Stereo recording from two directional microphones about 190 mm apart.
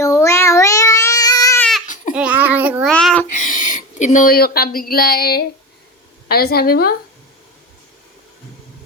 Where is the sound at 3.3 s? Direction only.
45° left (ahead or behind).